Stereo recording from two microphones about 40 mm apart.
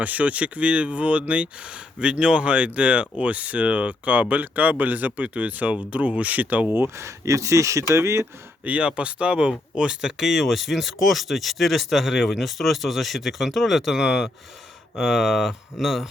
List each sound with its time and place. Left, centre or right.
0.0 s speech: right
8.6 s speech: right
10.1 s speech: centre
14.0 s speech: centre